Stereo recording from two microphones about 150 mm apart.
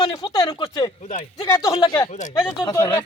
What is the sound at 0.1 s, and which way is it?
Speech, 25° left (ahead or behind).